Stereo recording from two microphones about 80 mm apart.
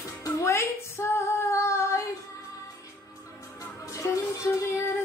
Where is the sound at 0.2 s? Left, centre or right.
Left.